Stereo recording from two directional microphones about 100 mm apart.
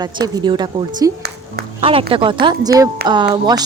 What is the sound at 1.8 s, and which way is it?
Speech, 65° right (ahead or behind).